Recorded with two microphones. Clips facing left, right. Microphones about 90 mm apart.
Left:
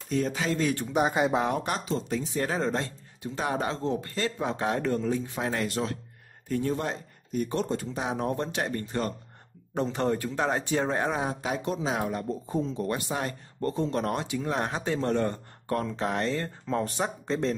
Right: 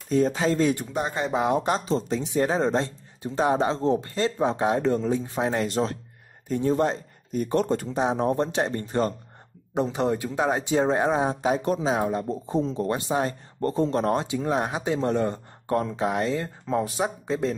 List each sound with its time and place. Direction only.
0.1 s speech: 35° right (ahead or behind)
0.9 s speech: 10° left (ahead or behind)
1.5 s speech: 25° right (ahead or behind)
7.5 s speech: 55° right (ahead or behind)
7.9 s speech: 25° right (ahead or behind)
9.8 s speech: 10° right (ahead or behind)
14.6 s speech: 10° right (ahead or behind)
16.0 s speech: 10° right (ahead or behind)